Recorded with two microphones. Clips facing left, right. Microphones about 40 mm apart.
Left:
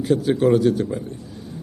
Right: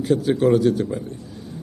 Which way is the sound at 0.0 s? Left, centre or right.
Centre.